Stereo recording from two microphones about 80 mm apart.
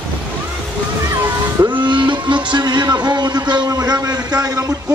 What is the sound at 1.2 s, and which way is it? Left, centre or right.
Speech, right.